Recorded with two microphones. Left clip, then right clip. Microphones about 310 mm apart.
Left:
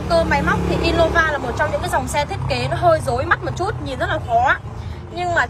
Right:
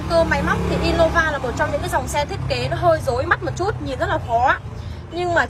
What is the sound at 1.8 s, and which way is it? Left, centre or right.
A woman's voice, centre.